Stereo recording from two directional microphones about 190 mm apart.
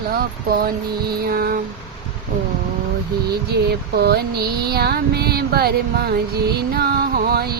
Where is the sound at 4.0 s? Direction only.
60° right (ahead or behind).